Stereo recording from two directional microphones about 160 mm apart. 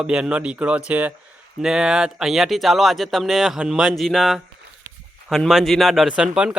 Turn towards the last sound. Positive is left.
turn(degrees=-5)  # may be behind; listen again after turning